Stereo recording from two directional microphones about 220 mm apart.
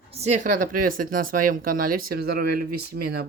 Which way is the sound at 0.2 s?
30° right (ahead or behind).